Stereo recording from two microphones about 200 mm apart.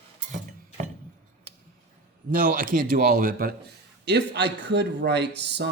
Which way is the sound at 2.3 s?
45° right (ahead or behind).